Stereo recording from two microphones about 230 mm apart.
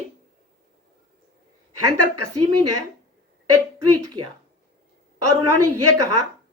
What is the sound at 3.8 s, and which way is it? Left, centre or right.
A woman's voice, right.